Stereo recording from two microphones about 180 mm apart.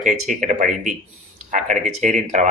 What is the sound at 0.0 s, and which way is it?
Speech, 45° right (ahead or behind).